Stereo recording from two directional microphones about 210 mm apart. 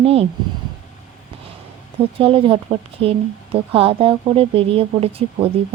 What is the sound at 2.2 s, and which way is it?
Speech, 25° right (ahead or behind).